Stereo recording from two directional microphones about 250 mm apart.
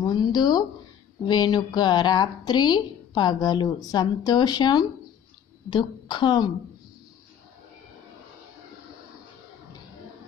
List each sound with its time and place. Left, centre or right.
0.0 s a woman's voice: centre